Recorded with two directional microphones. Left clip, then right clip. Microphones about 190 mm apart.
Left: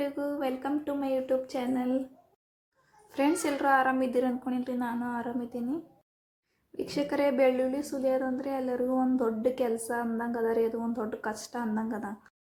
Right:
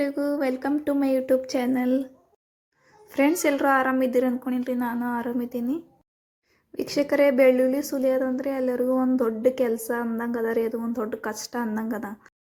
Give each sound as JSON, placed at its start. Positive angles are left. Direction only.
{"t": 0.0, "sound": "speech", "side_deg": -35}
{"t": 3.1, "sound": "a woman's voice", "side_deg": -25}